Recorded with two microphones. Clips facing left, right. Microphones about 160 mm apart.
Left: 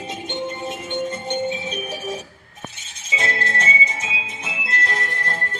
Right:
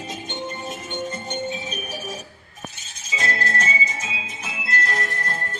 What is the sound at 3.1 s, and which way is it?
Music, 25° left (ahead or behind).